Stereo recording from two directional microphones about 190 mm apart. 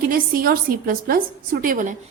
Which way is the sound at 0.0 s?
50° right (ahead or behind).